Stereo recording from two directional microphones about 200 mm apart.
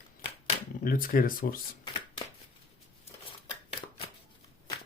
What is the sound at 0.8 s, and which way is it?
Speech, 45° left (ahead or behind).